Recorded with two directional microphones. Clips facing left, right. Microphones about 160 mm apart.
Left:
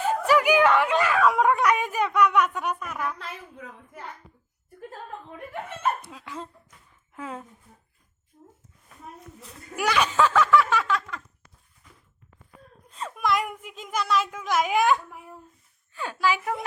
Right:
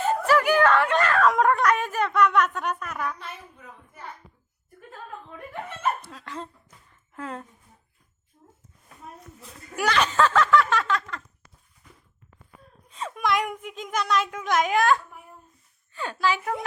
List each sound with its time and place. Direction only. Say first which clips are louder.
0.0 s speech: even; 10° left (ahead or behind)
3.2 s a woman's voice: left 2 dB; 90° left
6.1 s a child's voice: right 1 dB; 5° left (ahead or behind)
9.7 s speech: even; 10° left (ahead or behind)
12.9 s a child's voice: even; centre (ahead or behind)
14.8 s a child's voice: even; 15° left (ahead or behind)